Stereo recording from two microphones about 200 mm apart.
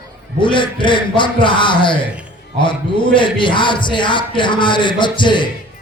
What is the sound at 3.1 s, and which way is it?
A man's voice, 25° left (ahead or behind).